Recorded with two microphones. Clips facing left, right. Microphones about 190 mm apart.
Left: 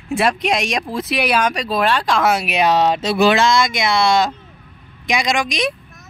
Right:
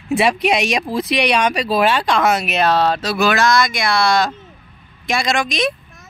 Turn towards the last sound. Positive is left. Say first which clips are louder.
# right 1 dB
turn(degrees=15)  # may be behind; listen again after turning